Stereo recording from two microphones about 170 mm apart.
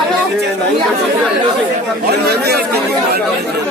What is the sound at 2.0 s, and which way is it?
Speech, 70° right (ahead or behind).